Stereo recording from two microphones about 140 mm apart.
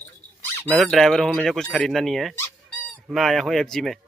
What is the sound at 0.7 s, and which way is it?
Speech, 5° left (ahead or behind).